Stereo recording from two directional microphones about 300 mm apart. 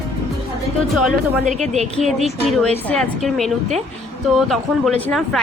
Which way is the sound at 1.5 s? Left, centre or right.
Right.